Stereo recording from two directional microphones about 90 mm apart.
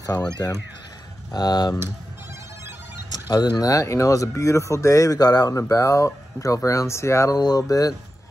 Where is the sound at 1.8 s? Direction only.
30° right (ahead or behind).